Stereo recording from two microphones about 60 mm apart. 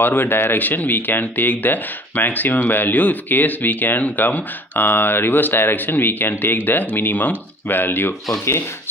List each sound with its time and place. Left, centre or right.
0.0 s speech: left